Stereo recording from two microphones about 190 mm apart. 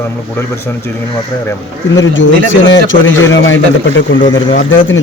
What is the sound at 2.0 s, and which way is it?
A man's voice, 85° left.